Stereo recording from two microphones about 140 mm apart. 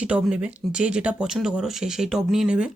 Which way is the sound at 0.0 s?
10° right (ahead or behind).